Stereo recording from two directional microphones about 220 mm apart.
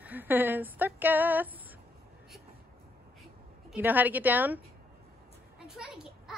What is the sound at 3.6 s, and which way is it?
Speech, 10° right (ahead or behind).